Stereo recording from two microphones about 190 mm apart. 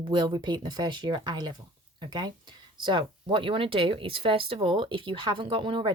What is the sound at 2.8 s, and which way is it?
Speech, 25° right (ahead or behind).